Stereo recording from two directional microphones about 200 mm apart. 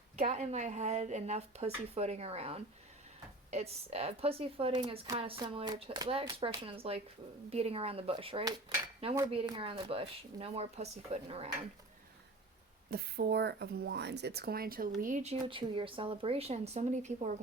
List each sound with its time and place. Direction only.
0.2 s speech: 35° right (ahead or behind)
12.9 s speech: 50° right (ahead or behind)